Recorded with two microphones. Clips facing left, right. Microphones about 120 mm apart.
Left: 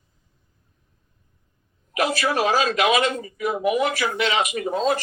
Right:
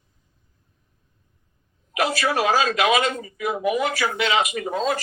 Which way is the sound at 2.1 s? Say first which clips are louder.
Right 1 dB; 35° left (ahead or behind).